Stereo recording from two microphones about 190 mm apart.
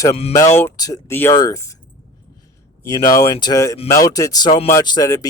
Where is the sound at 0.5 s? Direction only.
15° left (ahead or behind).